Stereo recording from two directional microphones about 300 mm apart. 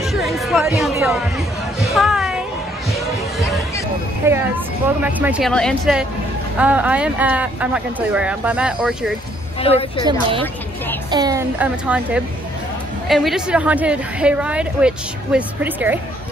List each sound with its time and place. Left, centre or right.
0.0 s music: centre
2.9 s a sound: centre
4.3 s speech: centre
9.6 s a woman's voice: centre
10.0 s a child's voice: centre